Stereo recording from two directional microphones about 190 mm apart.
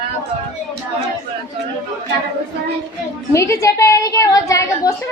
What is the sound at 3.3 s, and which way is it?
A woman's voice, 15° left (ahead or behind).